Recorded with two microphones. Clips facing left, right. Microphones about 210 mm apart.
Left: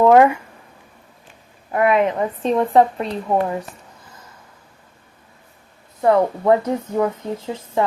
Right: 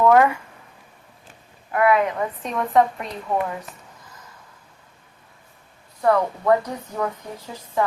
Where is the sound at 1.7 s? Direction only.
25° left (ahead or behind).